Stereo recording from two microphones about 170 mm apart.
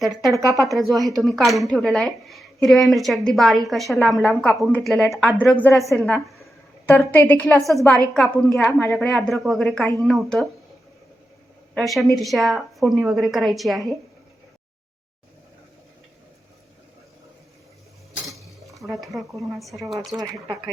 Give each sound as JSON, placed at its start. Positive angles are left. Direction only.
{"t": 0.0, "sound": "a woman's voice", "side_deg": 0}
{"t": 0.3, "sound": "speech", "side_deg": -20}
{"t": 0.6, "sound": "a woman's voice", "side_deg": 0}
{"t": 11.7, "sound": "a woman's voice", "side_deg": 0}
{"t": 18.3, "sound": "cutlery", "side_deg": 0}
{"t": 19.4, "sound": "a woman's voice", "side_deg": 0}